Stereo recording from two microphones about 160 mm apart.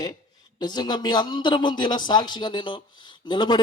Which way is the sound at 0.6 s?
25° left (ahead or behind).